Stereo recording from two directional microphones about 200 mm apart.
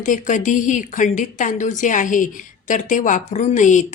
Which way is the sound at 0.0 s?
40° left (ahead or behind).